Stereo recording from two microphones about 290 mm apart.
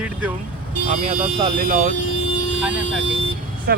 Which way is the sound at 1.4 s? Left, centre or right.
Right.